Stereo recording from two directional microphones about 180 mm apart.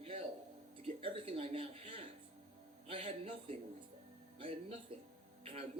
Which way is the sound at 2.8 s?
35° right (ahead or behind).